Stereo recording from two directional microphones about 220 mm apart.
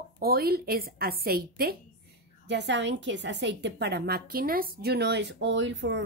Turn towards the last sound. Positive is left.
turn(degrees=-55)  # may be behind; listen again after turning